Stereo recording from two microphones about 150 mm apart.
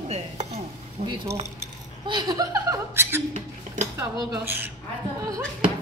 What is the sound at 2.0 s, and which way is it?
Speech, 25° right (ahead or behind).